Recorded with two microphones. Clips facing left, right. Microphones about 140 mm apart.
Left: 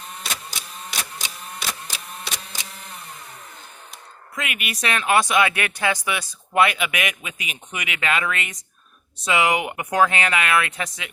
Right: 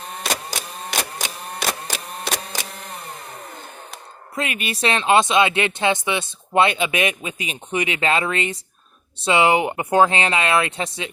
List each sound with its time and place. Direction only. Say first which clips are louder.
0.3 s printer: right 9 dB; 60° right (ahead or behind)
2.7 s a sound: right 5 dB; 50° right (ahead or behind)
4.4 s speech: right 5 dB; 30° right (ahead or behind)